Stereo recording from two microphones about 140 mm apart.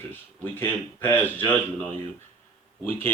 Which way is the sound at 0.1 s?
15° left (ahead or behind).